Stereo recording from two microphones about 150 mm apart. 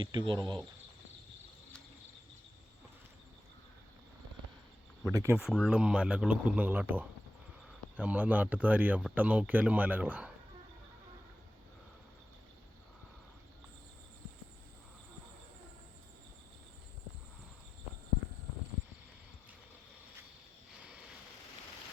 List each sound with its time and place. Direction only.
0.0 s speech: 30° right (ahead or behind)
5.1 s speech: 15° right (ahead or behind)
5.4 s speech: centre (ahead or behind)